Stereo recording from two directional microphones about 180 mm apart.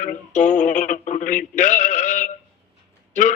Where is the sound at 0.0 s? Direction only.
45° left (ahead or behind).